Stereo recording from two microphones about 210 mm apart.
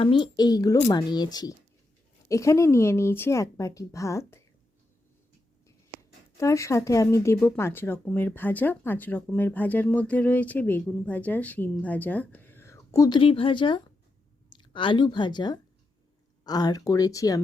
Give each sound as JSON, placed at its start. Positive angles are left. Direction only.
{"t": 0.0, "sound": "speech", "side_deg": 25}
{"t": 6.3, "sound": "speech", "side_deg": 15}